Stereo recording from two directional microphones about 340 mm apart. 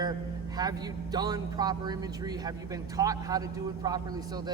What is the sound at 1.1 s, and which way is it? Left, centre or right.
Speech, centre.